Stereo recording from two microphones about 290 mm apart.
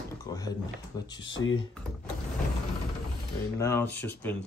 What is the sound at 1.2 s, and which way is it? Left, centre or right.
Speech, left.